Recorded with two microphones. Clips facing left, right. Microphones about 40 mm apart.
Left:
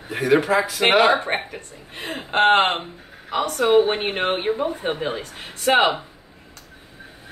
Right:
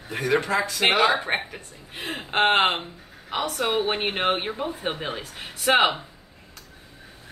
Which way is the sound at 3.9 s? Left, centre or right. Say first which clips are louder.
Left 1 dB; centre.